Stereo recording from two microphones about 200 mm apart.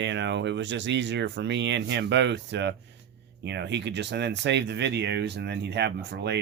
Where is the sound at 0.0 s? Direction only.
60° right (ahead or behind).